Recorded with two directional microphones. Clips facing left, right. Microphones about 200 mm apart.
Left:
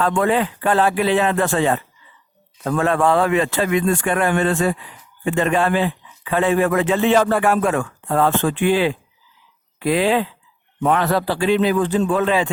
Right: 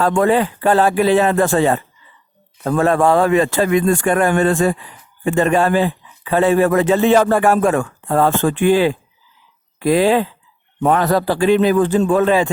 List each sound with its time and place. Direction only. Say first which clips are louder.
0.0 s a man's voice: right 3 dB; 40° right (ahead or behind)